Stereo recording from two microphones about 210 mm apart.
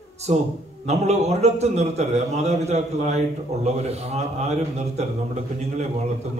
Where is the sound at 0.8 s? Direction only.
30° right (ahead or behind).